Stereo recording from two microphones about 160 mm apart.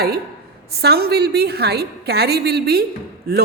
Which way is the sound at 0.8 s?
80° right.